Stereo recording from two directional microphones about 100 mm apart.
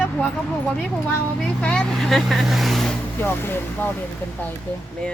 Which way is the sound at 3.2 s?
20° left (ahead or behind).